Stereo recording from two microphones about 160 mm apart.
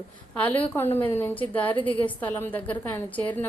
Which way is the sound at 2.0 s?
10° left (ahead or behind).